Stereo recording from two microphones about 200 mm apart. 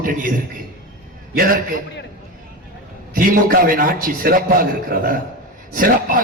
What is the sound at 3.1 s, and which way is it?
A man's voice, 45° right (ahead or behind).